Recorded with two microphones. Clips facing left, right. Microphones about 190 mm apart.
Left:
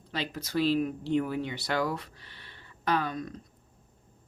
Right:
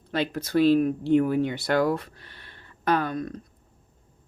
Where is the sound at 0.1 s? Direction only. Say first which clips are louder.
Right 7 dB; 55° right (ahead or behind).